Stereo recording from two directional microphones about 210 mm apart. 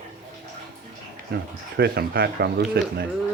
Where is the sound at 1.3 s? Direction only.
50° right (ahead or behind).